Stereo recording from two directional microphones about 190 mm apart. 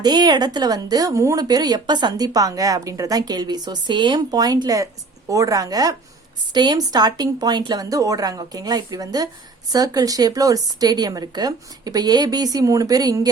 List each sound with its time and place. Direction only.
0.0 s speech: 20° right (ahead or behind)